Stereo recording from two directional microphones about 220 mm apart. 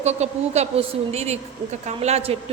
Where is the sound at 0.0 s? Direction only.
30° right (ahead or behind).